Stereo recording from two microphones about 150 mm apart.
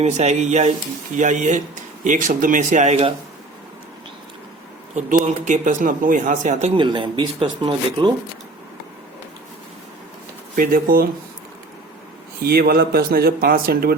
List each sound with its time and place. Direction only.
0.0 s speech: 50° right (ahead or behind)
4.9 s speech: 55° right (ahead or behind)
6.7 s speech: 30° right (ahead or behind)
10.5 s speech: 70° right (ahead or behind)
12.4 s speech: 90° right